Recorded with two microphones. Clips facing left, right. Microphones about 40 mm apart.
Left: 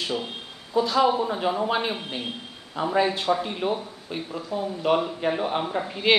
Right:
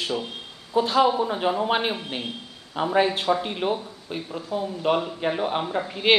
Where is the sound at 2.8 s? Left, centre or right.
Right.